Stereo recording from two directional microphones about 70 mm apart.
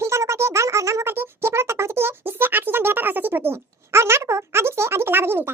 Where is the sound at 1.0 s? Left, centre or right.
Right.